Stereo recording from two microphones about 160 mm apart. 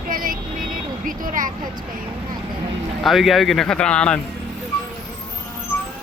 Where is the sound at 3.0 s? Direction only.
Centre (ahead or behind).